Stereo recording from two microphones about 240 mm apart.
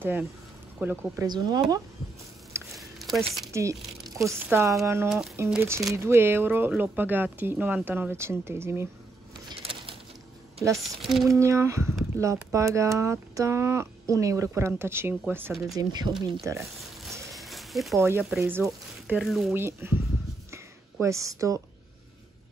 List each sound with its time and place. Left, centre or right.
0.0 s speech: centre
2.5 s a sound: centre
3.5 s speech: centre
9.5 s bird: right
10.6 s speech: centre
15.7 s speech: centre
17.3 s a sound: centre
18.0 s speech: centre
20.5 s a sound: centre